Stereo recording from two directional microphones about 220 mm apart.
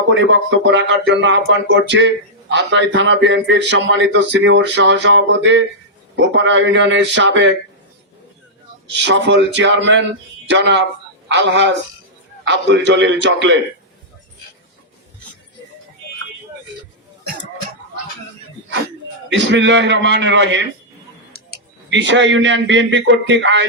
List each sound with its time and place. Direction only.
0.1 s speech: 55° right (ahead or behind)
8.9 s a man's voice: 55° right (ahead or behind)
19.3 s speech: 55° right (ahead or behind)
21.8 s speech: 55° right (ahead or behind)